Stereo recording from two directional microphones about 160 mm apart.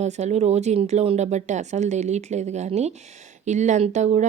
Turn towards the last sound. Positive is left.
turn(degrees=-45)  # may be behind; listen again after turning